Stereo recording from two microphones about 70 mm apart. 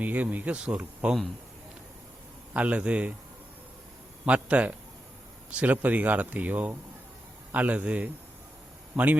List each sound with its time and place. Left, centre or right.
0.0 s speech: right
2.5 s speech: centre
4.3 s speech: centre